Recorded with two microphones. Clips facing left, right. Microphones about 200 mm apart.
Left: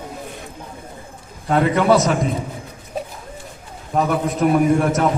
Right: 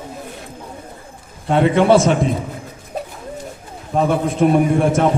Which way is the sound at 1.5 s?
30° right (ahead or behind).